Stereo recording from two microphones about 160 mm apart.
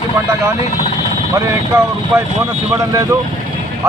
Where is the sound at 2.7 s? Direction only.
20° right (ahead or behind).